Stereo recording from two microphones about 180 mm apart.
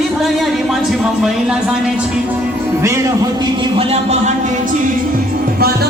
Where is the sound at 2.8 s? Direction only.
20° right (ahead or behind); by 4.8 s 45° right (ahead or behind).